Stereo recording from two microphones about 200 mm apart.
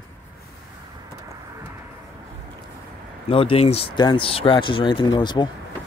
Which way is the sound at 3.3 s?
30° left (ahead or behind).